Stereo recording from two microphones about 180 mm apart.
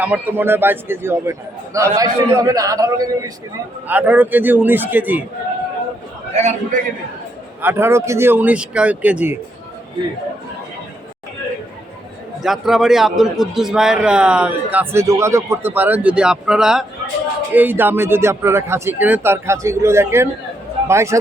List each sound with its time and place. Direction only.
0.0 s a man's voice: 10° right (ahead or behind)
3.8 s a man's voice: 10° right (ahead or behind)
6.3 s a man's voice: 40° right (ahead or behind)
7.6 s a man's voice: 10° right (ahead or behind)
12.4 s a man's voice: centre (ahead or behind)